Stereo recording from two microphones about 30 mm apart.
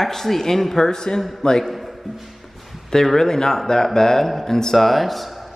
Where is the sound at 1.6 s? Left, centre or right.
Centre.